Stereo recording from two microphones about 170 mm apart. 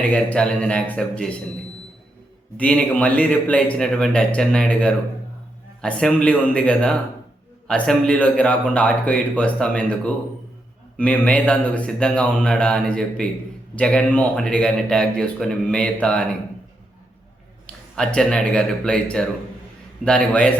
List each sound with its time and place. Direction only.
0.1 s a man's voice: 5° left (ahead or behind)
2.6 s a man's voice: 10° left (ahead or behind)
17.9 s speech: 5° left (ahead or behind)